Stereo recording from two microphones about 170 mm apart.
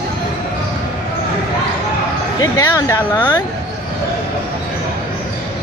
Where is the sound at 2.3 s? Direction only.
20° left (ahead or behind).